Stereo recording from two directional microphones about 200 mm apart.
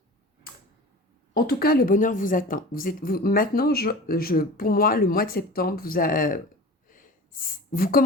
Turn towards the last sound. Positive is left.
turn(degrees=45)  # may be behind; listen again after turning